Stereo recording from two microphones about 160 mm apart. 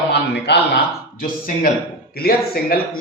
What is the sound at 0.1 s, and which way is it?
Speech, 90° left.